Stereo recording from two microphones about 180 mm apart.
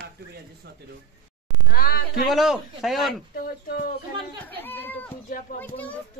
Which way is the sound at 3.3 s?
55° left (ahead or behind).